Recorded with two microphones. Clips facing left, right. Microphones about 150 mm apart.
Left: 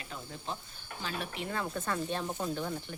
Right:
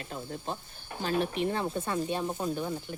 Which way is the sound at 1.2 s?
25° right (ahead or behind).